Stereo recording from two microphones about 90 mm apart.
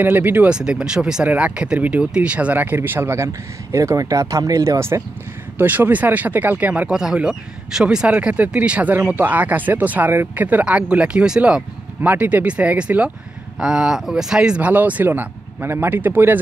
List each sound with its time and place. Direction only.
0.0 s speech: 20° right (ahead or behind)
5.6 s speech: 20° right (ahead or behind)